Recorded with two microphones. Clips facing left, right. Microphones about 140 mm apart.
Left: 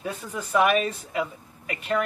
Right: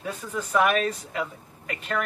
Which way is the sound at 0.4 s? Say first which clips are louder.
Left 1 dB; 5° left (ahead or behind).